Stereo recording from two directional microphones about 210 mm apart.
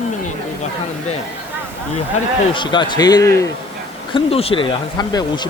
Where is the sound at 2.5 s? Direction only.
20° left (ahead or behind).